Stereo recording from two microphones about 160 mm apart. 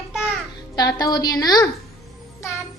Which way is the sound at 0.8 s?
25° left (ahead or behind).